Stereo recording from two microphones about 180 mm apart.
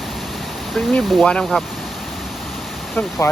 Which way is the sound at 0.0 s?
Centre (ahead or behind).